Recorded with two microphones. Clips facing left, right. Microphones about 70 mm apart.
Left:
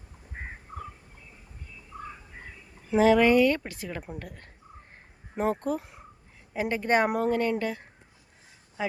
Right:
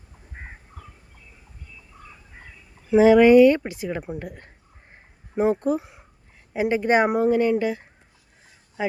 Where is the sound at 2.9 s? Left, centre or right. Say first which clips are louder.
Right 7 dB; centre.